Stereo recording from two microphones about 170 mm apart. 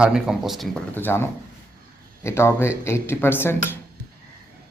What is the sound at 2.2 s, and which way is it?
A man's voice, 15° left (ahead or behind).